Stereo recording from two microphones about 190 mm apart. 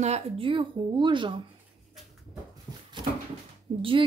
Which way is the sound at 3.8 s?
25° right (ahead or behind).